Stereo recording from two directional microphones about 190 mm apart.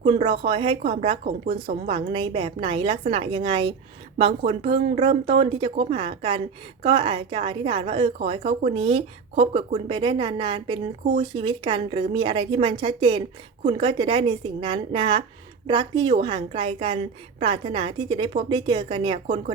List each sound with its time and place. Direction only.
0.0 s a woman's voice: 30° right (ahead or behind)